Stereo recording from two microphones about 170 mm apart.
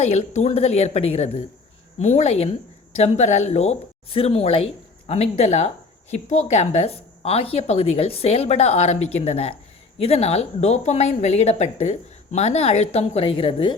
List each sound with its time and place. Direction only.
0.0 s speech: 40° left (ahead or behind)